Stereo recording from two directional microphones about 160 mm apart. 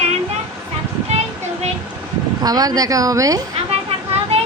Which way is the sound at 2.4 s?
25° right (ahead or behind).